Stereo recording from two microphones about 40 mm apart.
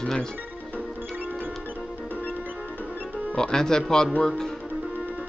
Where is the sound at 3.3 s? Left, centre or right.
Centre.